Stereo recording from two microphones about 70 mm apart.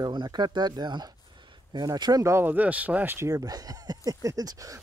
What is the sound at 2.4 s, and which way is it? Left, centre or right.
Speech, right.